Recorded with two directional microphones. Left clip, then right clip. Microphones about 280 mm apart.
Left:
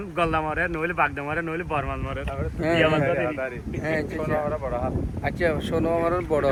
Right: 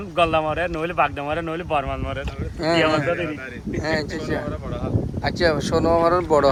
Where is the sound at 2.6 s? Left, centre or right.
Centre.